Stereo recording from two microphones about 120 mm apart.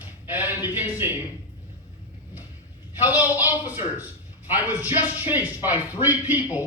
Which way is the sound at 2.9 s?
15° right (ahead or behind).